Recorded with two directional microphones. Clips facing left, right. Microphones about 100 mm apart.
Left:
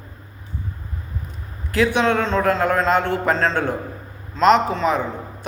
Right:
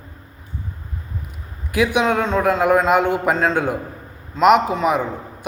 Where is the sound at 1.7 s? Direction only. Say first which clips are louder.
Even; 10° right (ahead or behind).